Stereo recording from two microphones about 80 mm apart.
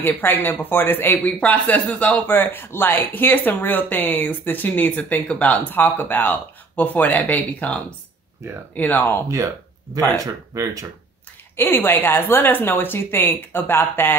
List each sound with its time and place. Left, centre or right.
0.0 s speech: left
2.2 s speech: left
8.4 s speech: right
8.7 s speech: left
9.9 s speech: right
11.5 s speech: left